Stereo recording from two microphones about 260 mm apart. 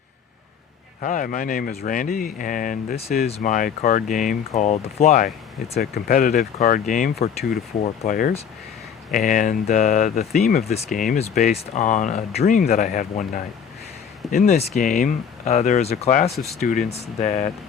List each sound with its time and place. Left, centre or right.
1.0 s speech: left